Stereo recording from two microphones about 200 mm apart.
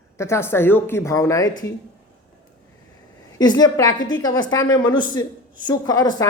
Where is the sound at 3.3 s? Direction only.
20° left (ahead or behind).